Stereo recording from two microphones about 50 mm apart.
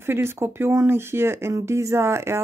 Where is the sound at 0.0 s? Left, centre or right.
Right.